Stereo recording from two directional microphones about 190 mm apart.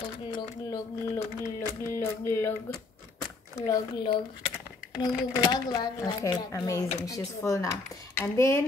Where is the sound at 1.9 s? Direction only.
15° left (ahead or behind).